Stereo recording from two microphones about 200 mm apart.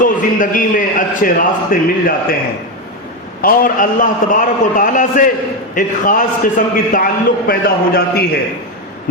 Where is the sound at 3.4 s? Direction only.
45° left (ahead or behind).